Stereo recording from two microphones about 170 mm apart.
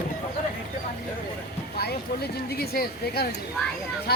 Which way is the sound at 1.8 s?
70° left (ahead or behind).